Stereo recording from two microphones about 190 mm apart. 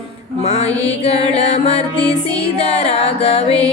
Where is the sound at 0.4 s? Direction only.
35° left (ahead or behind).